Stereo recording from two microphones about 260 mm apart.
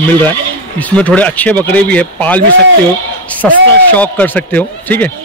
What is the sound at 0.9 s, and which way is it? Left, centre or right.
Speech, centre.